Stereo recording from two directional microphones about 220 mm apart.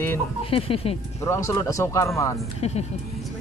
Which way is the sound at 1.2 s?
10° left (ahead or behind).